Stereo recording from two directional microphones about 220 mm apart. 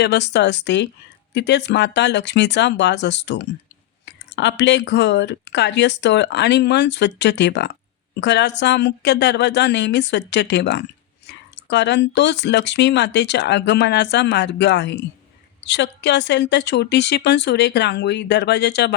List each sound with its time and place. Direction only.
0.0 s speech: 50° left (ahead or behind)